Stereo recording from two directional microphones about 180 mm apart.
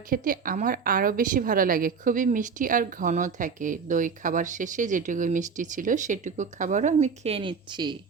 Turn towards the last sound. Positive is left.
turn(degrees=-25)  # may be behind; listen again after turning